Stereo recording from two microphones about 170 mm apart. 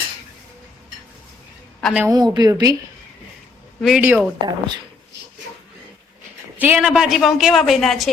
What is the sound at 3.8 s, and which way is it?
Speech, 5° right (ahead or behind).